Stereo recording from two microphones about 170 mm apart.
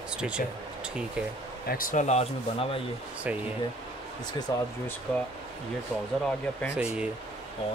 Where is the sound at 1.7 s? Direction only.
55° left (ahead or behind).